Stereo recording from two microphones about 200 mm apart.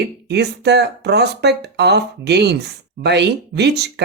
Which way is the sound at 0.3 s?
55° right (ahead or behind).